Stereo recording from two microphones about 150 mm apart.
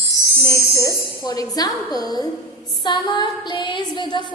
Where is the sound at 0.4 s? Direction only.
20° left (ahead or behind).